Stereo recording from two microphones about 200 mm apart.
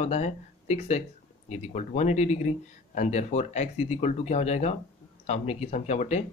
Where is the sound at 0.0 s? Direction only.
30° left (ahead or behind).